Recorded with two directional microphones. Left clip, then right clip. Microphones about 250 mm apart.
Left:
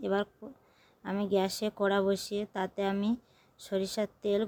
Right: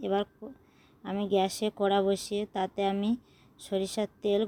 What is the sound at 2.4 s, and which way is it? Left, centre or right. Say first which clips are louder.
Speech: right 3 dB; centre.